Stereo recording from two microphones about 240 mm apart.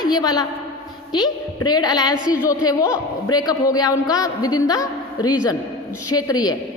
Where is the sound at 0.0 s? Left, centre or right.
Centre.